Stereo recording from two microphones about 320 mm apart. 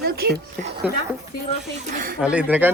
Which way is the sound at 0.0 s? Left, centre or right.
Right.